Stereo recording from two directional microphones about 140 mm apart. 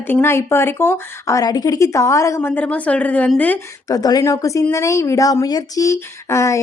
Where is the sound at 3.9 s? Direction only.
25° left (ahead or behind).